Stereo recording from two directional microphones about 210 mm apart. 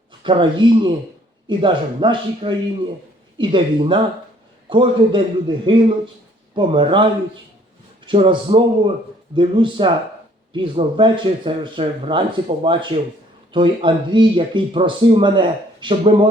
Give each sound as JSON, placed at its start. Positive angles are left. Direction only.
{"t": 0.2, "sound": "speech", "side_deg": -25}